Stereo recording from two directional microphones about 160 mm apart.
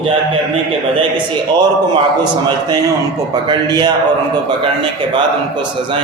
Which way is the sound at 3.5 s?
25° right (ahead or behind).